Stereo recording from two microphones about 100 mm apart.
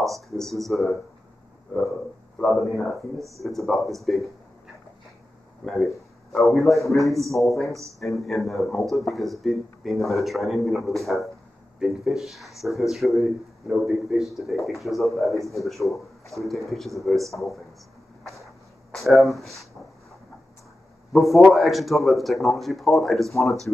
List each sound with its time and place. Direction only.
0.0 s speech: 5° left (ahead or behind)
2.4 s speech: 5° left (ahead or behind)
5.6 s speech: 5° left (ahead or behind)
18.9 s speech: centre (ahead or behind)
21.1 s speech: centre (ahead or behind)